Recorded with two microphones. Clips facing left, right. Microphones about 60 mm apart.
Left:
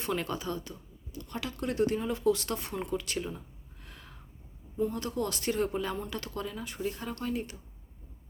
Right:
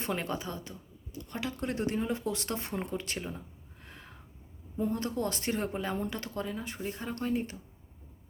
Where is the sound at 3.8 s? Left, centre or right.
Right.